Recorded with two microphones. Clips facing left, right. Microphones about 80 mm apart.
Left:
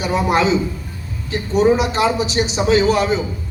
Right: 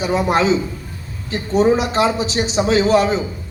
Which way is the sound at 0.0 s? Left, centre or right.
Right.